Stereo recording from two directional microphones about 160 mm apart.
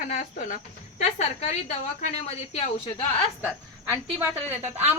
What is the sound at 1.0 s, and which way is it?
A woman's voice, 45° left (ahead or behind).